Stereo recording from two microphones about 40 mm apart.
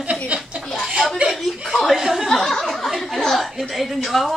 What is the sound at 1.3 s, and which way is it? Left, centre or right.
Chuckle, centre.